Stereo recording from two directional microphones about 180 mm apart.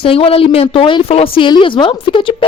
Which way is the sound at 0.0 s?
30° left (ahead or behind).